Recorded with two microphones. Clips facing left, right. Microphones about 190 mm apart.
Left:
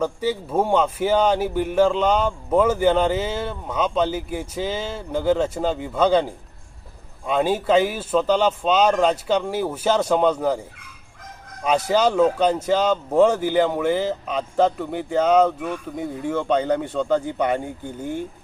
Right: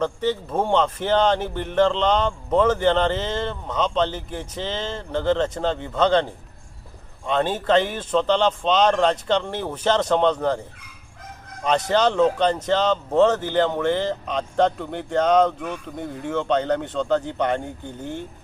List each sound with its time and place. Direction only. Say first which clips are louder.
0.0 s speech: even; 10° left (ahead or behind)
11.6 s speech: left 1 dB; 10° left (ahead or behind)